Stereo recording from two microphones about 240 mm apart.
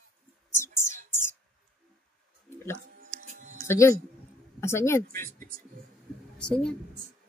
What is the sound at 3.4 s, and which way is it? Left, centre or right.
Music, right.